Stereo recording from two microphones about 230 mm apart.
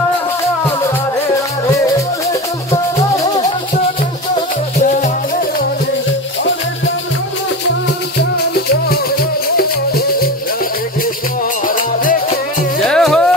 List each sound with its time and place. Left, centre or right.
4.7 s music: left
8.8 s music: left
11.6 s music: left
12.8 s music: centre